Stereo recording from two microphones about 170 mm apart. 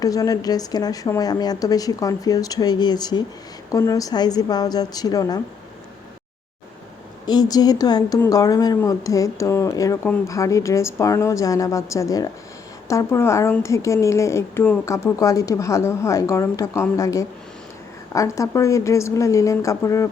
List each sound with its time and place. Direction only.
0.0 s speech: 20° left (ahead or behind)
7.3 s a woman's voice: 25° left (ahead or behind)